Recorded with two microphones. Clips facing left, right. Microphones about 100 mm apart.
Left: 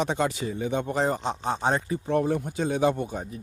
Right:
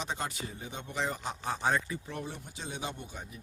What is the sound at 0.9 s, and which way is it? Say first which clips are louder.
Speech: left 7 dB; 40° left (ahead or behind).